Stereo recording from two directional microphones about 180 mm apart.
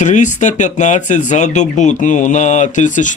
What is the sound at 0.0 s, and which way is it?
Speech, 40° left (ahead or behind).